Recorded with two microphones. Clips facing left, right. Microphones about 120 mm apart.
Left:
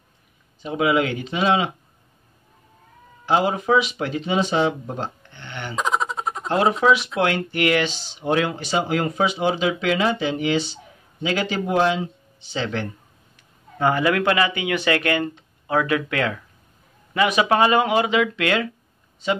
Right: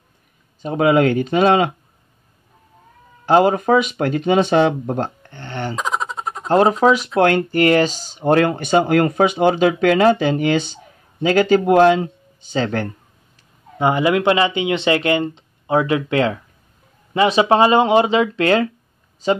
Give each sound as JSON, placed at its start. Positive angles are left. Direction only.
{"t": 0.6, "sound": "speech", "side_deg": -45}
{"t": 3.3, "sound": "speech", "side_deg": -50}
{"t": 5.8, "sound": "giggle", "side_deg": 0}
{"t": 6.5, "sound": "speech", "side_deg": -40}
{"t": 13.7, "sound": "speech", "side_deg": -20}